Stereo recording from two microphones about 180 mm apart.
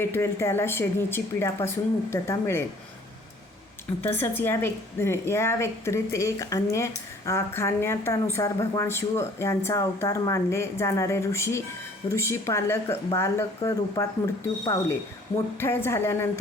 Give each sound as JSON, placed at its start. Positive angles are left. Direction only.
{"t": 0.0, "sound": "a woman's voice", "side_deg": 15}
{"t": 4.0, "sound": "a woman's voice", "side_deg": 10}